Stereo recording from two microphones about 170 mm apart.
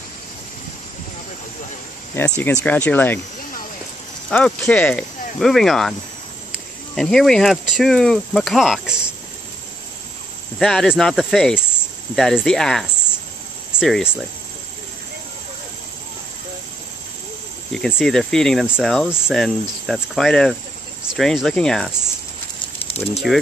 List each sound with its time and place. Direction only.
2.1 s speech: 10° left (ahead or behind)
4.3 s speech: 5° left (ahead or behind)
10.6 s speech: 5° left (ahead or behind)
17.7 s speech: centre (ahead or behind)
22.8 s a sound: 35° left (ahead or behind)